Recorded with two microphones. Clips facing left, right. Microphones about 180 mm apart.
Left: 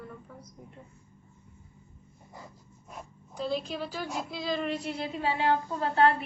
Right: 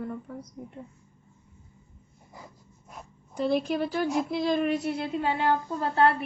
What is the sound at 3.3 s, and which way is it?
A woman's voice, 60° right (ahead or behind).